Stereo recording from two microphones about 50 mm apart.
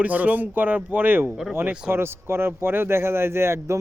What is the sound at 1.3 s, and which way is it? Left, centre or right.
Speech, centre.